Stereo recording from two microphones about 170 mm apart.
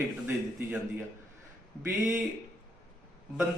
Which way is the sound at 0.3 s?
10° right (ahead or behind).